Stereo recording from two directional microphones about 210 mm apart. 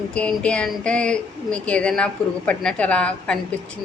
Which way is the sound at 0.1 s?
5° left (ahead or behind).